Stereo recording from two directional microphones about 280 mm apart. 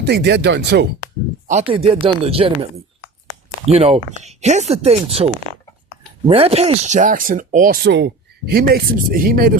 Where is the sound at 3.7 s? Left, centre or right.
Right.